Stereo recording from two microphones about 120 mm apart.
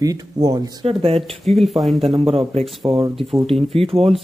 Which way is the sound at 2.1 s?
55° right (ahead or behind).